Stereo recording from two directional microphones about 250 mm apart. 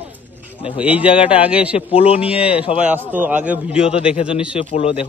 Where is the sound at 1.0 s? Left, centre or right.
Left.